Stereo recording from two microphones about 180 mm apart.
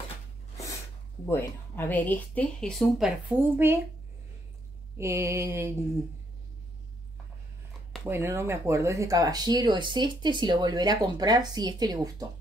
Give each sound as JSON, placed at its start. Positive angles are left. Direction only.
{"t": 1.2, "sound": "speech", "side_deg": 15}
{"t": 4.9, "sound": "mantra", "side_deg": -15}
{"t": 8.0, "sound": "speech", "side_deg": -15}